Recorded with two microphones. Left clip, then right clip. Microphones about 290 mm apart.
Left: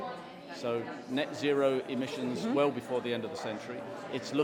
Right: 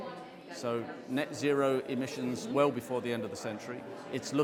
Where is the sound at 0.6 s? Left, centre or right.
Right.